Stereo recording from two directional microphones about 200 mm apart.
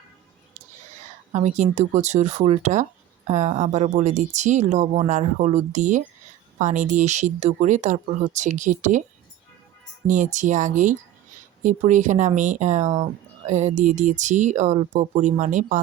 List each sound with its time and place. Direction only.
1.3 s speech: 35° right (ahead or behind)
10.1 s speech: 40° right (ahead or behind)